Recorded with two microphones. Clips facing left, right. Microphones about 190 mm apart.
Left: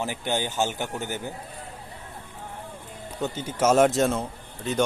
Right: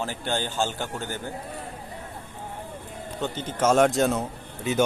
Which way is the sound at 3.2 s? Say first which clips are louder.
Left 1 dB; 10° left (ahead or behind).